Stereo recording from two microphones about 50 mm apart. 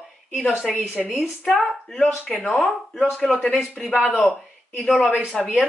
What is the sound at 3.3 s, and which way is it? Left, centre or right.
Speech, centre.